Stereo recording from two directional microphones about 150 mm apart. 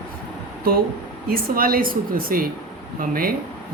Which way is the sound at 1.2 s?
75° right (ahead or behind).